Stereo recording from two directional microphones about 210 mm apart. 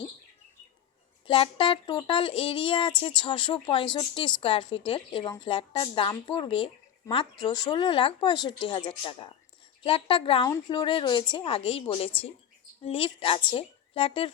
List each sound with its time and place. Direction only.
1.3 s speech: 25° left (ahead or behind)